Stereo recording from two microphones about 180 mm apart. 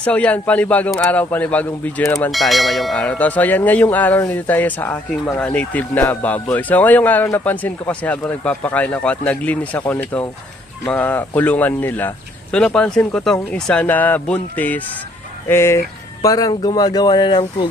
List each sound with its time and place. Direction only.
0.0 s speech: 5° left (ahead or behind)
2.3 s speech: centre (ahead or behind); by 17.7 s 25° left (ahead or behind)